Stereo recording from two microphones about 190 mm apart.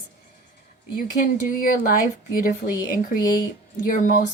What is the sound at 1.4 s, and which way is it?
Speech, 45° left (ahead or behind).